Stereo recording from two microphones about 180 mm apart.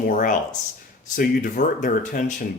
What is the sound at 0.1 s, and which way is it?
Speech, 45° left (ahead or behind).